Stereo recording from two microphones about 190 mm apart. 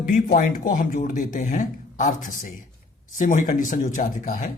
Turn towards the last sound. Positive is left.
turn(degrees=45)  # may be behind; listen again after turning